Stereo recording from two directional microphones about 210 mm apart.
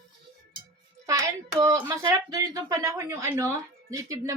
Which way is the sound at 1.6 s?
15° right (ahead or behind).